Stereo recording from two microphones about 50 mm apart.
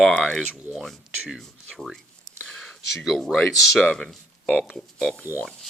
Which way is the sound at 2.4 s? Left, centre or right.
Centre.